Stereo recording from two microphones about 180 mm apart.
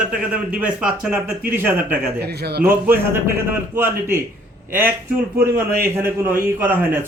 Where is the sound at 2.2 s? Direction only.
65° right (ahead or behind).